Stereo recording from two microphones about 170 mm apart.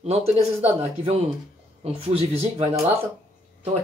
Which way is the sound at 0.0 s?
35° right (ahead or behind).